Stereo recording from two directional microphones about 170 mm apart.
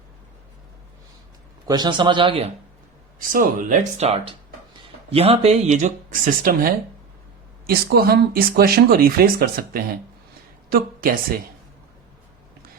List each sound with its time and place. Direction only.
1.6 s a man's voice: 25° right (ahead or behind)
3.2 s a woman's voice: 55° right (ahead or behind)